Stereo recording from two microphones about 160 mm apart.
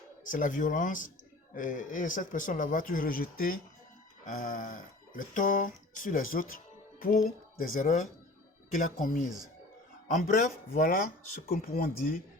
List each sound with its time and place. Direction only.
0.3 s speech: 55° left (ahead or behind)